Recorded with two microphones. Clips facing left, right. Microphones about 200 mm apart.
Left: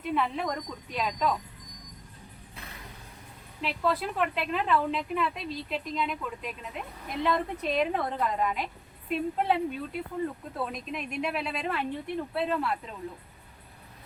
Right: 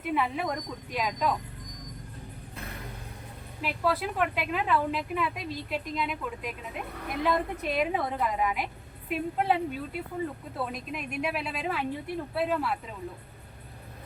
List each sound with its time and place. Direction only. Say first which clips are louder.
0.1 s a woman's voice: even; 5° right (ahead or behind)
3.6 s a woman's voice: even; 5° right (ahead or behind)
6.9 s a woman's voice: right 3 dB; 65° right (ahead or behind)
7.2 s a woman's voice: even; 5° right (ahead or behind)